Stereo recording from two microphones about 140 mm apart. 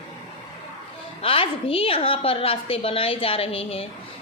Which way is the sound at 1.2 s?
40° left (ahead or behind).